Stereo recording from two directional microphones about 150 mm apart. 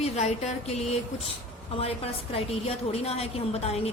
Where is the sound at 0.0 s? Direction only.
45° left (ahead or behind).